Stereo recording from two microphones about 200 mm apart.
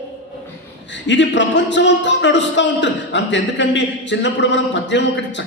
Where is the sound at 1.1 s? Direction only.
60° left (ahead or behind).